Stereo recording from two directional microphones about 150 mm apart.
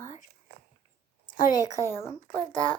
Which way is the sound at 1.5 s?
25° left (ahead or behind).